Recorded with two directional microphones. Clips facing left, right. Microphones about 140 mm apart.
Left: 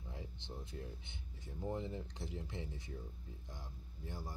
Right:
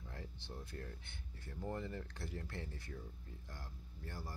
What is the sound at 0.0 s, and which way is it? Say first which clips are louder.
Speech: left 1 dB; 15° left (ahead or behind).